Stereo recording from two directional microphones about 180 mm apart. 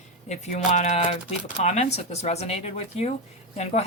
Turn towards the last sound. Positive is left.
turn(degrees=35)  # may be behind; listen again after turning